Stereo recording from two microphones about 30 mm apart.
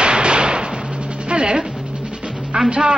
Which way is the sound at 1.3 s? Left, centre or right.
Right.